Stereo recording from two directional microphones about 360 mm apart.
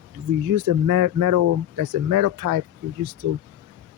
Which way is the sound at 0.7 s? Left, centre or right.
Right.